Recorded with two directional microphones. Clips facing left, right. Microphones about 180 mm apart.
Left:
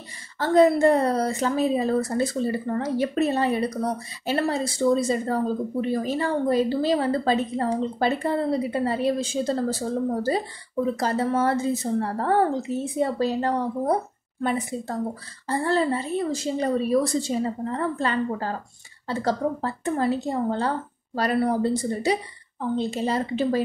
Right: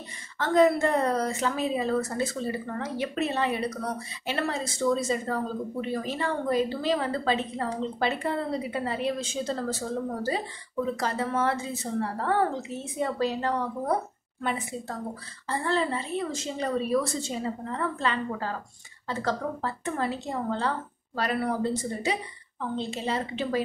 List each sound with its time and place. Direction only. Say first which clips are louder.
0.4 s speech: left 4 dB; 35° left (ahead or behind)